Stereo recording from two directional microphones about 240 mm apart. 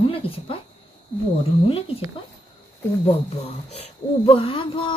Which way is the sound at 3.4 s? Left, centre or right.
Left.